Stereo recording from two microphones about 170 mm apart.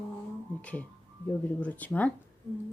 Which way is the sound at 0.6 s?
10° left (ahead or behind).